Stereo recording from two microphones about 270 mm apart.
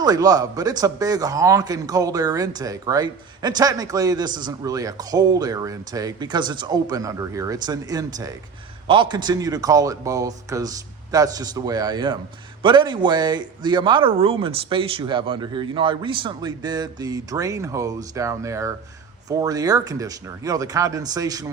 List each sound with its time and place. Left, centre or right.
0.0 s speech: centre